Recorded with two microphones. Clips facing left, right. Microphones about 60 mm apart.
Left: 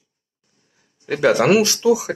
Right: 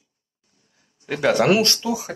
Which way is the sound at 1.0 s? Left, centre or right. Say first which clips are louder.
Left 2 dB; left.